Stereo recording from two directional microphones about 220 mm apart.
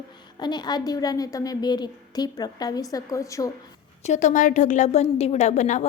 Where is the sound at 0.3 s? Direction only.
20° left (ahead or behind).